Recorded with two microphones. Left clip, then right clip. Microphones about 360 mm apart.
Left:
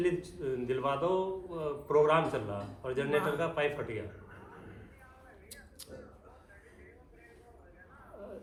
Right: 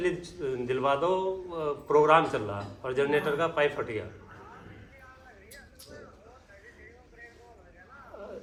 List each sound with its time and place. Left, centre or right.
0.0 s speech: right